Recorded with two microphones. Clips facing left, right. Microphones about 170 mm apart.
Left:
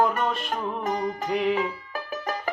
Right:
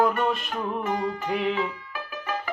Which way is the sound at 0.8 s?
35° left (ahead or behind).